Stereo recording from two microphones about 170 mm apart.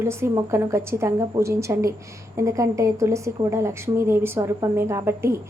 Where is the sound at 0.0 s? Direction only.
15° right (ahead or behind).